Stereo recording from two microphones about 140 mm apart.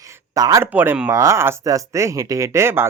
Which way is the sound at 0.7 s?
15° right (ahead or behind).